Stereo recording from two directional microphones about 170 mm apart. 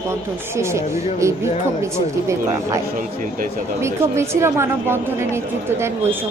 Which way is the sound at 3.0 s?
50° right (ahead or behind).